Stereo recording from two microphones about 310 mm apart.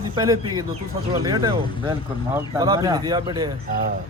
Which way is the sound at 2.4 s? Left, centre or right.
Centre.